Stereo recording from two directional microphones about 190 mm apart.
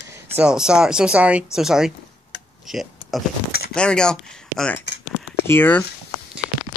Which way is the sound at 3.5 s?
55° left (ahead or behind).